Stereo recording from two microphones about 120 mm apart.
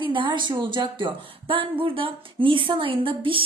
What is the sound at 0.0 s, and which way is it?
A woman's voice, 40° right (ahead or behind).